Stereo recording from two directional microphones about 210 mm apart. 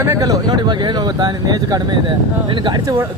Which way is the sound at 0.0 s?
15° right (ahead or behind).